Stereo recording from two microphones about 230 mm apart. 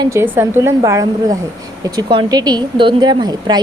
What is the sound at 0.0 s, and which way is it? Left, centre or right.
A woman's voice, centre.